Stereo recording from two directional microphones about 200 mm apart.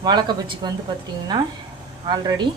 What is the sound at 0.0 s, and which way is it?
Speech, 20° right (ahead or behind).